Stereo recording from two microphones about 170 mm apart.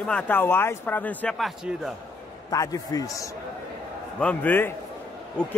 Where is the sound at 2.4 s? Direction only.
20° left (ahead or behind).